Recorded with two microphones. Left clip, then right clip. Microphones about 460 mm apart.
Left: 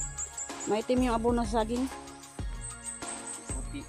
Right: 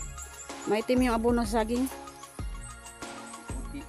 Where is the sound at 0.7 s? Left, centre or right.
Right.